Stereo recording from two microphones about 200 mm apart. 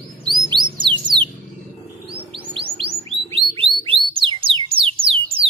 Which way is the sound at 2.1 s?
25° right (ahead or behind).